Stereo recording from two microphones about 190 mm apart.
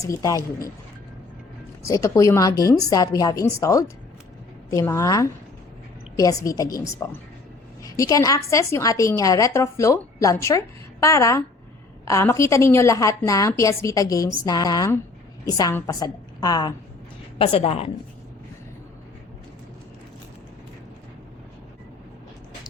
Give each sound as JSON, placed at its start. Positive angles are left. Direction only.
{"t": 0.0, "sound": "a woman's voice", "side_deg": 15}
{"t": 1.9, "sound": "a woman's voice", "side_deg": 15}